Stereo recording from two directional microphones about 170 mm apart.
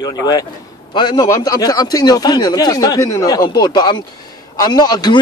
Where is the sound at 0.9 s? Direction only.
25° left (ahead or behind).